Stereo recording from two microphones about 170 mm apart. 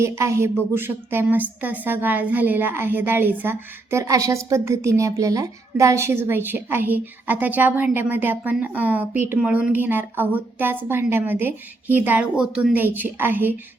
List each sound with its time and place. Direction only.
0.0 s a woman's voice: 15° right (ahead or behind)